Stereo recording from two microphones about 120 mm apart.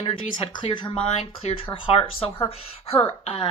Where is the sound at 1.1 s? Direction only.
60° left (ahead or behind).